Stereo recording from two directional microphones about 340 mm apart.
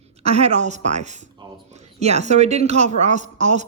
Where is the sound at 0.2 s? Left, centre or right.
Centre.